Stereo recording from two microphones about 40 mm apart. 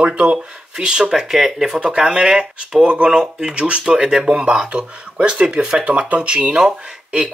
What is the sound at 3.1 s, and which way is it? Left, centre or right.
Speech, centre.